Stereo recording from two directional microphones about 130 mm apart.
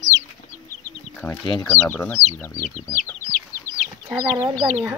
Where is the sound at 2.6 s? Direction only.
80° left.